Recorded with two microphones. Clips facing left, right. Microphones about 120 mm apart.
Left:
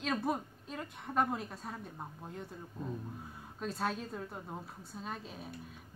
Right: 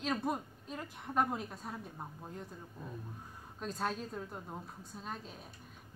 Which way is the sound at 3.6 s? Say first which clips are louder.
Left 1 dB; centre (ahead or behind).